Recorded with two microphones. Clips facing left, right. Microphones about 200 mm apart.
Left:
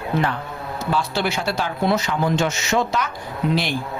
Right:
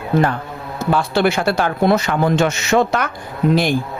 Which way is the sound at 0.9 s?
55° right (ahead or behind).